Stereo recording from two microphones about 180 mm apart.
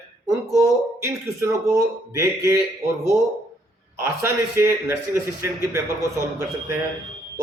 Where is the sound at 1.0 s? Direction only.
15° right (ahead or behind).